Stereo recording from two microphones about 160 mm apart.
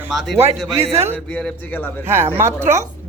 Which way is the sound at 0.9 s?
15° right (ahead or behind).